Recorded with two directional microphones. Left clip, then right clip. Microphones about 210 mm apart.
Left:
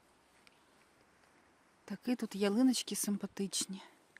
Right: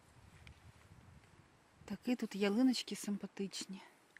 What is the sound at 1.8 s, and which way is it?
Speech, 5° left (ahead or behind).